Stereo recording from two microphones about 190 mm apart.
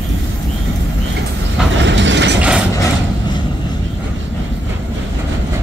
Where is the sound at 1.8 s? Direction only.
70° right (ahead or behind).